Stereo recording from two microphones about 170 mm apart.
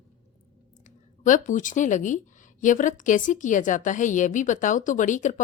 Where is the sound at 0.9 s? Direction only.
45° left (ahead or behind).